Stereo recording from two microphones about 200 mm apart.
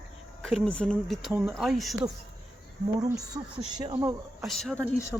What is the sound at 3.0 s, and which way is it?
Speech, 20° right (ahead or behind).